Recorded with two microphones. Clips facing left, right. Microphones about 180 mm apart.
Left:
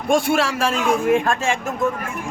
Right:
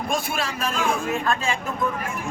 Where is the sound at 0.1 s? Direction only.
75° left (ahead or behind).